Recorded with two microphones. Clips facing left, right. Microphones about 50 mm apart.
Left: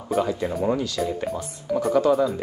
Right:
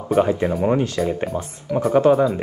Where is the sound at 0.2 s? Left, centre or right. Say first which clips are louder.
Right 6 dB; right.